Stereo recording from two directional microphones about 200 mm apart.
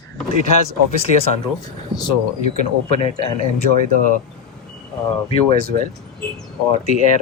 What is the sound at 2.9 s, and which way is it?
Speech, 30° left (ahead or behind).